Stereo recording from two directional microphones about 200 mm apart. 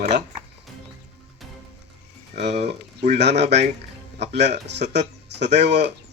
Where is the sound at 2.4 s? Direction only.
55° right (ahead or behind).